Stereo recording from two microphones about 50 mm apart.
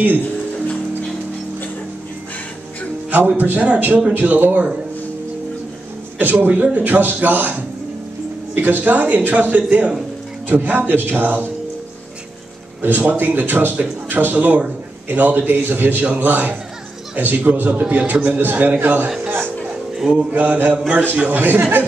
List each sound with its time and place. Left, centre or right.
3.1 s a man's voice: right
4.1 s a man's voice: right
6.1 s a man's voice: right
8.5 s a man's voice: right
13.0 s a man's voice: right
20.1 s mantra: right
20.5 s a man's voice: right